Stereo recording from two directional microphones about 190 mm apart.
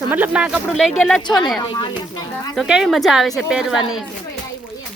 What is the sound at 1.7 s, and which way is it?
Speech, 20° left (ahead or behind).